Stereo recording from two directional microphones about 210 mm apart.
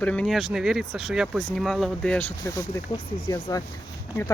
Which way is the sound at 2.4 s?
15° left (ahead or behind).